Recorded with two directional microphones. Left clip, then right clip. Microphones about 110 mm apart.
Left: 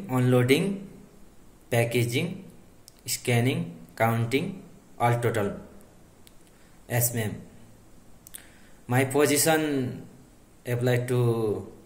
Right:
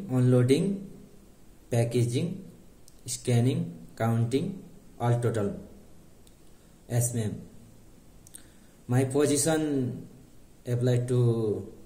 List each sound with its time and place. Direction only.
0.1 s a man's voice: 20° right (ahead or behind)
1.7 s a man's voice: 20° right (ahead or behind)
6.9 s a man's voice: 20° right (ahead or behind)
8.4 s a man's voice: 20° right (ahead or behind)
11.1 s speech: 25° left (ahead or behind)